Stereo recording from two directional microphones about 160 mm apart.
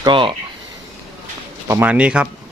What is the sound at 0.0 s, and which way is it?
Speech, 30° right (ahead or behind).